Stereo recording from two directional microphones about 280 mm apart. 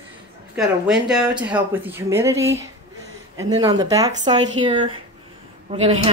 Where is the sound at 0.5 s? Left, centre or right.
Centre.